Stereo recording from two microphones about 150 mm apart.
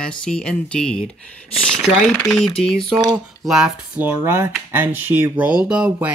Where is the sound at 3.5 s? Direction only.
10° right (ahead or behind).